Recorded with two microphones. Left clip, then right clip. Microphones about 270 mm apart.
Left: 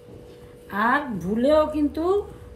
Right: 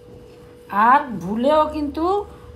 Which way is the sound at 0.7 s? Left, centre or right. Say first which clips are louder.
Right 7 dB; right.